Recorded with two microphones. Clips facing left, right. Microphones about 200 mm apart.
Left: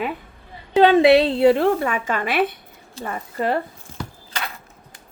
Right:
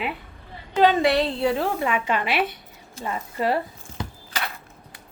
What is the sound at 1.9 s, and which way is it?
A woman's voice, 45° left (ahead or behind).